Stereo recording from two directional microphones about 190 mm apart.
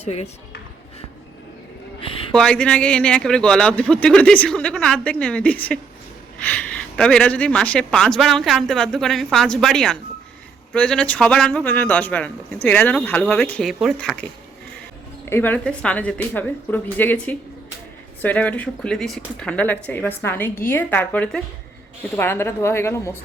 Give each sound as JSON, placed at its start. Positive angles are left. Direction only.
{"t": 0.0, "sound": "speech", "side_deg": 35}
{"t": 2.0, "sound": "a sound", "side_deg": 30}
{"t": 2.3, "sound": "speech", "side_deg": 5}
{"t": 15.3, "sound": "speech", "side_deg": 10}